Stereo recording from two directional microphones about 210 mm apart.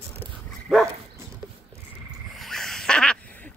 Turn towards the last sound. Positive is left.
turn(degrees=5)  # may be behind; listen again after turning